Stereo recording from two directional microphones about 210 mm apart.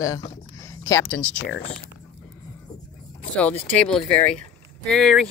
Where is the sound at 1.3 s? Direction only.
60° left (ahead or behind).